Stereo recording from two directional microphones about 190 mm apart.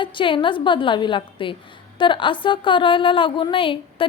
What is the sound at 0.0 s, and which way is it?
A woman's voice, 25° left (ahead or behind).